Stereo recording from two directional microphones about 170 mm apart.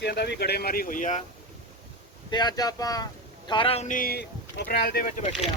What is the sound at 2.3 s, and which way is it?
Speech, 25° left (ahead or behind).